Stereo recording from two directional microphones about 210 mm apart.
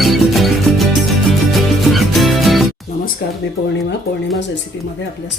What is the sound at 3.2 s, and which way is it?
Speech, 45° left (ahead or behind).